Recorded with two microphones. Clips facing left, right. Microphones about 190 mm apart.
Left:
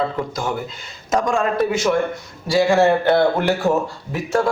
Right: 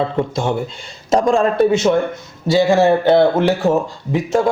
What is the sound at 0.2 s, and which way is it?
A man's voice, 25° right (ahead or behind).